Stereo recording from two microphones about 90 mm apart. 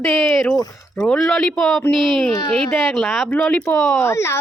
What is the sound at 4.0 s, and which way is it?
Speech, 30° left (ahead or behind).